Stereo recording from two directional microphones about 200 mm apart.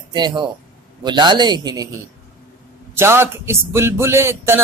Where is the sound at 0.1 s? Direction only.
20° right (ahead or behind).